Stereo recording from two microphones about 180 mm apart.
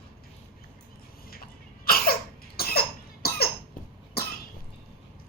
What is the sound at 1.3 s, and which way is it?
Cough, 55° left (ahead or behind).